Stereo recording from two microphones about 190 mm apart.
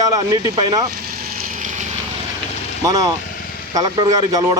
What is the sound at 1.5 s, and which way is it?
Vehicle, 40° right (ahead or behind).